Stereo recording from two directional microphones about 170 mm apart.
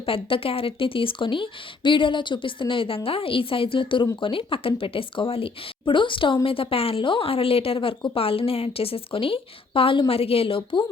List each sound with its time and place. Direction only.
0.0 s a woman's voice: 30° left (ahead or behind)